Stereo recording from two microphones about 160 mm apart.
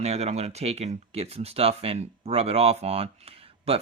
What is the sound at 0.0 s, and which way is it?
Speech, 40° right (ahead or behind).